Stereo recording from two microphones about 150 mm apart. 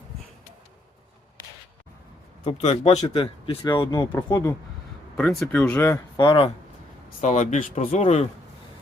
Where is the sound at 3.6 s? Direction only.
30° left (ahead or behind).